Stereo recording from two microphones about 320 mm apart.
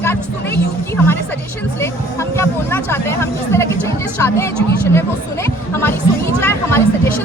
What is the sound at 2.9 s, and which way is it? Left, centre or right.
Speech, centre.